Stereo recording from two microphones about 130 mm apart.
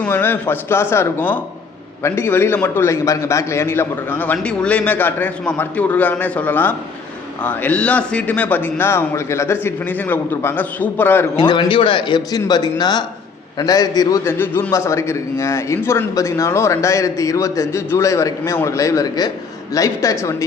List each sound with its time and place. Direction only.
0.1 s a man's voice: 15° left (ahead or behind)
11.3 s a man's voice: 40° left (ahead or behind)
14.3 s a man's voice: 15° left (ahead or behind)